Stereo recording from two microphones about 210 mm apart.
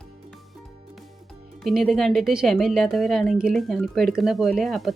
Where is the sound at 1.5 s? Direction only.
Centre (ahead or behind).